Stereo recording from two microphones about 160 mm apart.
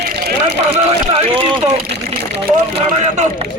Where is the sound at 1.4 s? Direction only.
35° right (ahead or behind).